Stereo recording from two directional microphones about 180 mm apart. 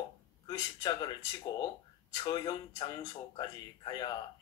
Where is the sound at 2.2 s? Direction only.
25° left (ahead or behind).